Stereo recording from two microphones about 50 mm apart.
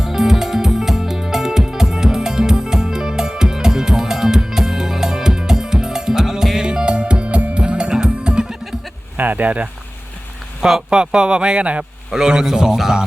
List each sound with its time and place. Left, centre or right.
0.0 s music: centre
9.1 s speech: right
10.6 s a man's voice: centre